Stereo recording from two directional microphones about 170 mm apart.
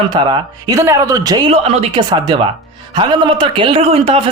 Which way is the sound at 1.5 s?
35° right (ahead or behind).